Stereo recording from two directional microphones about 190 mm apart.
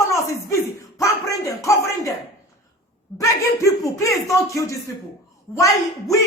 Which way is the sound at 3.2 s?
15° left (ahead or behind).